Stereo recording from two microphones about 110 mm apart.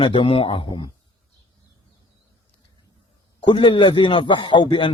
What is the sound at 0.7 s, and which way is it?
Speech, 40° left (ahead or behind).